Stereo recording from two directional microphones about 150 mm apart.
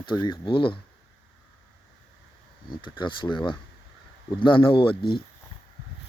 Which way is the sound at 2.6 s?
30° left (ahead or behind).